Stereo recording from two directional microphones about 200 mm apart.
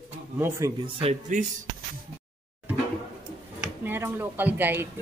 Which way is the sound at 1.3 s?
40° right (ahead or behind).